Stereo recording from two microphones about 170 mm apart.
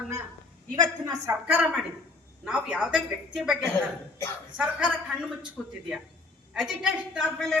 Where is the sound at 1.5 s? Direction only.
10° right (ahead or behind).